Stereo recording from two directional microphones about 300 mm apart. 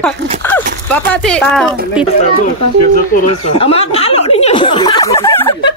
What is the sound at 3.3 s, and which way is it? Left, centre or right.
Snicker, centre.